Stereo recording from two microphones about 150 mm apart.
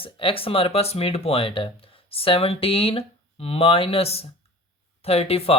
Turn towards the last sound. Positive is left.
turn(degrees=40)  # may be behind; listen again after turning